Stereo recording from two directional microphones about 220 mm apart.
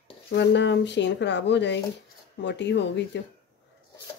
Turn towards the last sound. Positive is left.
turn(degrees=55)  # may be behind; listen again after turning